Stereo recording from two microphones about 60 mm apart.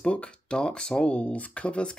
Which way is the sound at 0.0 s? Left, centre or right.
Centre.